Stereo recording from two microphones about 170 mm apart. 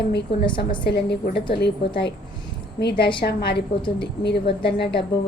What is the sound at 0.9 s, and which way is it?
A woman's voice, 75° left (ahead or behind).